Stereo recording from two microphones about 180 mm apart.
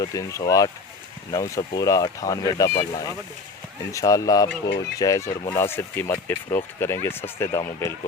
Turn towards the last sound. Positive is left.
turn(degrees=20)  # may be behind; listen again after turning